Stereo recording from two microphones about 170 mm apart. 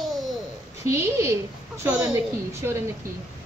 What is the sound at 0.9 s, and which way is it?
Speech, 15° right (ahead or behind).